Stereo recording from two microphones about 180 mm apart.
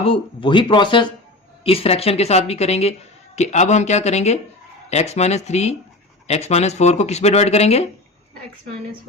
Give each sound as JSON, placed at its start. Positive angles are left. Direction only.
{"t": 0.0, "sound": "speech", "side_deg": 30}